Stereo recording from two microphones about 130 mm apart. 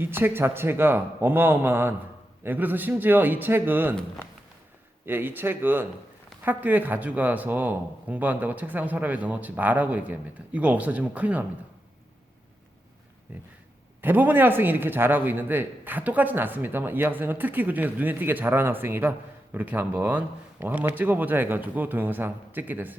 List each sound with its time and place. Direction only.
0.0 s a man's voice: 15° right (ahead or behind)
5.0 s a man's voice: 15° right (ahead or behind)
13.3 s a man's voice: 10° right (ahead or behind)